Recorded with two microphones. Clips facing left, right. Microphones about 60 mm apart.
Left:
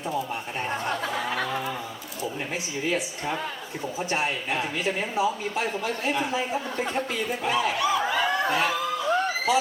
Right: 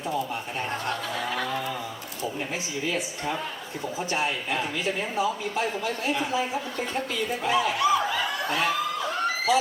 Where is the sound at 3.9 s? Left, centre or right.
Left.